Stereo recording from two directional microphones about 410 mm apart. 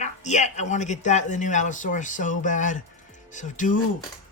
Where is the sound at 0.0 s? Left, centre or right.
Centre.